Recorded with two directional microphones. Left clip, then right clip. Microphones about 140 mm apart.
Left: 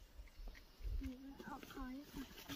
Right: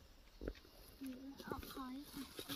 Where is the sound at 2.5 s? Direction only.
35° left (ahead or behind).